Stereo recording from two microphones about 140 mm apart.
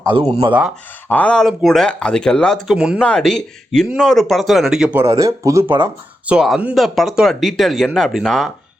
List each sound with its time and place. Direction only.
0.1 s speech: 40° right (ahead or behind)
1.0 s speech: 10° left (ahead or behind)
2.7 s speech: 5° right (ahead or behind)
3.0 s speech: 5° left (ahead or behind)
4.9 s speech: 20° right (ahead or behind)
6.2 s speech: 5° right (ahead or behind)